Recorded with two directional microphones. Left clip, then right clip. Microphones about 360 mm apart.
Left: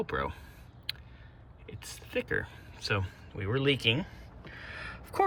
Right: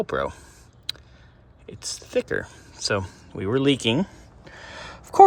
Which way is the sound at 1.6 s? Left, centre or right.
Centre.